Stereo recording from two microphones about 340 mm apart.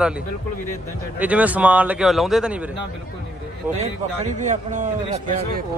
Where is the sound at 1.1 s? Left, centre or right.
Centre.